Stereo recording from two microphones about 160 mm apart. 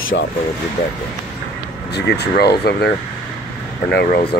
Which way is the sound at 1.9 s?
90° left.